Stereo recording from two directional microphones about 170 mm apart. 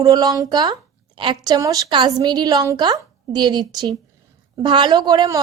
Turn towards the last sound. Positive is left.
turn(degrees=-25)  # may be behind; listen again after turning